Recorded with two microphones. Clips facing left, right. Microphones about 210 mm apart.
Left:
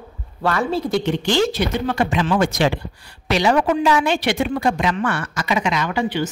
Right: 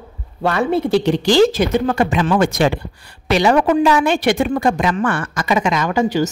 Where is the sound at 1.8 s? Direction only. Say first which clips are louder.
Right 3 dB; 50° right (ahead or behind).